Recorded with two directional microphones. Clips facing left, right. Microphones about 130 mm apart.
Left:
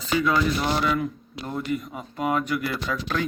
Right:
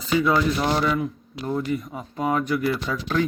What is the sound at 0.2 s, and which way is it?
Speech, 25° right (ahead or behind).